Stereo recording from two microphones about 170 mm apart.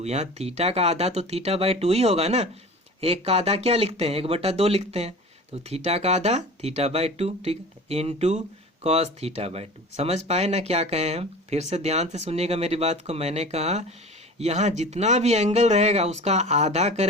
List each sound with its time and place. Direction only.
0.0 s speech: 40° right (ahead or behind)